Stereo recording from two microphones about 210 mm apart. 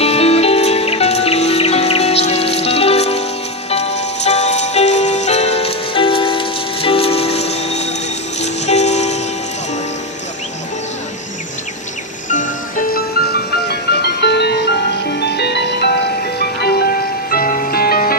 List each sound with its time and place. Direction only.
0.0 s music: 30° left (ahead or behind)
12.3 s music: 40° left (ahead or behind)